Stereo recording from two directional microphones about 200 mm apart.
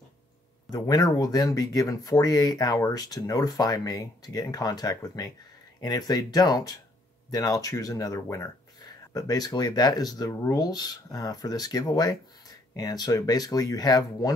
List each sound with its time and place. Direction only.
0.7 s speech: 20° left (ahead or behind)